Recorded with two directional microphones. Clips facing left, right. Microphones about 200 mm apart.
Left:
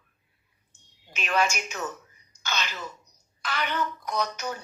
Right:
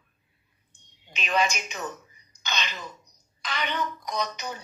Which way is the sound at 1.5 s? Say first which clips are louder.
Left 1 dB; 10° left (ahead or behind).